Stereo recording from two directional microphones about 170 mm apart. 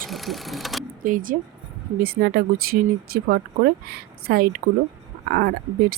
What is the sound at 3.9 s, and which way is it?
Speech, 60° right (ahead or behind).